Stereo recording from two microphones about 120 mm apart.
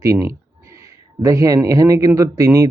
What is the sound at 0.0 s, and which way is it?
Speech, 25° right (ahead or behind).